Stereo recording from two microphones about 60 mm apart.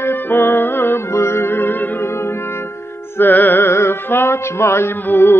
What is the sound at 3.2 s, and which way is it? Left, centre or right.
Music, left.